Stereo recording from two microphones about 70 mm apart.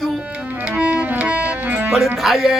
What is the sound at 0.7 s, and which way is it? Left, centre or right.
Music, centre.